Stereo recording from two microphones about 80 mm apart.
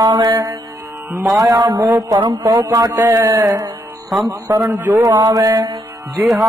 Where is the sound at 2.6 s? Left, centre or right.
Right.